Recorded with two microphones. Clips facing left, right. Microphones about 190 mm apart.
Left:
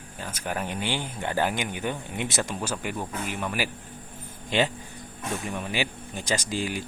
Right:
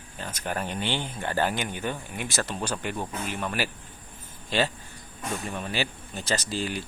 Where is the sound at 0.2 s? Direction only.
10° left (ahead or behind).